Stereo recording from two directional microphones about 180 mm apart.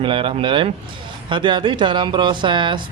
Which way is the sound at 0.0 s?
30° right (ahead or behind).